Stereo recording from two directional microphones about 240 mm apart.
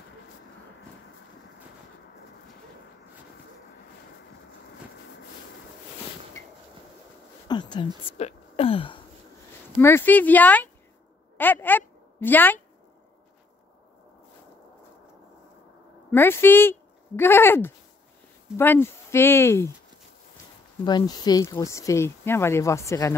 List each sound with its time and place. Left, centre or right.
7.4 s a sound: centre
9.8 s a woman's voice: centre
16.1 s speech: centre
20.8 s speech: centre